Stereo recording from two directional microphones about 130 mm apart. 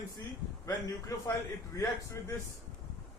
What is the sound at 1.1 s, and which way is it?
Speech, 25° left (ahead or behind).